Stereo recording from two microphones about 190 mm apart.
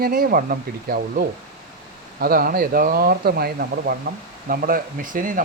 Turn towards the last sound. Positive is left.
turn(degrees=-45)  # may be behind; listen again after turning